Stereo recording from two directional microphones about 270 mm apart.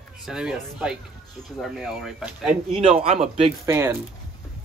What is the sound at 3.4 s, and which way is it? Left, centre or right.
Speech, centre.